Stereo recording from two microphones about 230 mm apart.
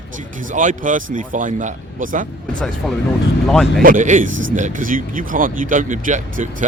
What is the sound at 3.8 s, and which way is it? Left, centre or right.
Speech, right.